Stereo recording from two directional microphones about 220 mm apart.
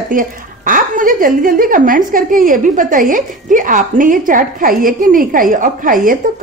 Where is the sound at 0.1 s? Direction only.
40° right (ahead or behind).